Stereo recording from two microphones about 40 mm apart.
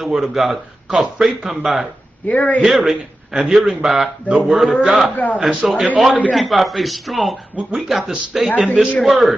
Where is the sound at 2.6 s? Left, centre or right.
Centre.